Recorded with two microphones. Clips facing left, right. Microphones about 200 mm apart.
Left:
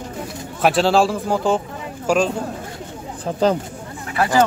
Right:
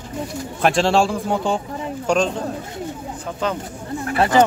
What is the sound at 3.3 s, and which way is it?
Speech, 35° left (ahead or behind).